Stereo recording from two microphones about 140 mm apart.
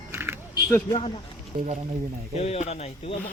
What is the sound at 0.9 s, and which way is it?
Speech, 40° left (ahead or behind).